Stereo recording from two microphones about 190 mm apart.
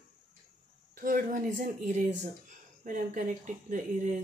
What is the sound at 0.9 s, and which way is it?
Speech, 45° right (ahead or behind).